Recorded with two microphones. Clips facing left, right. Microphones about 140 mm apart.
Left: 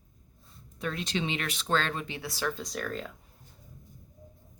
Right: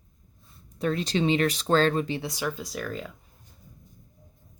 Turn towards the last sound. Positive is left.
turn(degrees=-5)  # may be behind; listen again after turning